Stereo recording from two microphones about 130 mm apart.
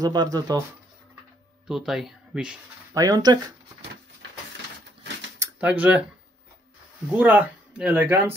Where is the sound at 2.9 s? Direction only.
30° right (ahead or behind).